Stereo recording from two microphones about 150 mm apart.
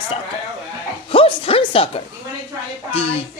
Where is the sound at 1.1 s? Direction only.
35° left (ahead or behind).